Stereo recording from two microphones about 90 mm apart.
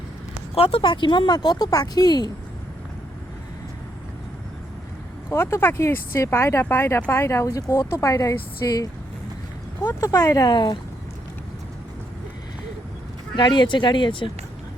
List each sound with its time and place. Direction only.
0.5 s speech: 90° left; by 2.3 s 50° left (ahead or behind)
5.3 s speech: 30° left (ahead or behind)
9.8 s speech: 40° left (ahead or behind)
10.5 s speech: 60° left (ahead or behind)
13.3 s speech: 55° left (ahead or behind)